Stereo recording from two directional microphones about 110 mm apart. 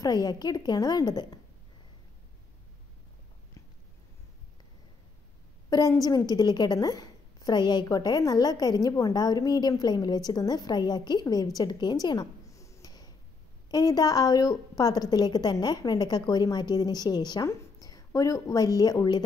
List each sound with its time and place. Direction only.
0.0 s a woman's voice: 35° left (ahead or behind)
5.7 s a woman's voice: 35° left (ahead or behind)